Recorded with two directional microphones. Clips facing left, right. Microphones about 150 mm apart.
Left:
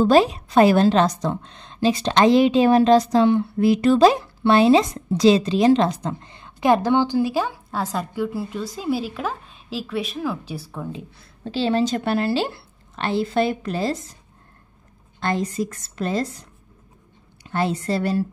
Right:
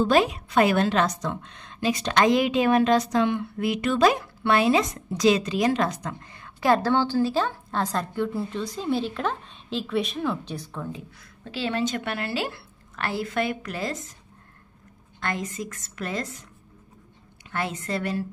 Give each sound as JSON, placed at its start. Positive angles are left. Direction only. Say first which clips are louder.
{"t": 0.0, "sound": "a woman's voice", "louder": "left 5 dB", "side_deg": 30}
{"t": 10.9, "sound": "a woman's voice", "louder": "left 3 dB", "side_deg": 25}
{"t": 15.1, "sound": "a woman's voice", "louder": "left 7 dB", "side_deg": 30}